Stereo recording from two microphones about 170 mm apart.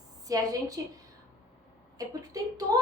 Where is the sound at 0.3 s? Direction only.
20° right (ahead or behind).